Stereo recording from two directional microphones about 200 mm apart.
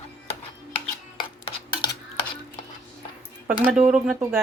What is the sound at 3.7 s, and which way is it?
Speech, 5° right (ahead or behind).